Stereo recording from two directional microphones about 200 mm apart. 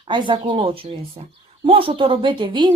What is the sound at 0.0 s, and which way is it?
A woman's voice, 25° right (ahead or behind).